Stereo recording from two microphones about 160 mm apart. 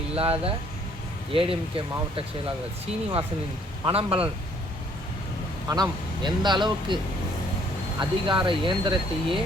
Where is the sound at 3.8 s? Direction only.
35° right (ahead or behind).